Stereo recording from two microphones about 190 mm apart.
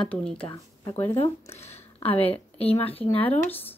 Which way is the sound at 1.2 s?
35° left (ahead or behind).